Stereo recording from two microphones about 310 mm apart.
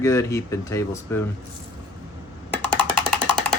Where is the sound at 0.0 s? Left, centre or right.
Centre.